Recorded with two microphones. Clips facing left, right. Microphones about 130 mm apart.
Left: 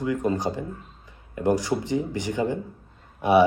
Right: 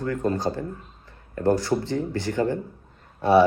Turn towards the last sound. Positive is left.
turn(degrees=15)  # may be behind; listen again after turning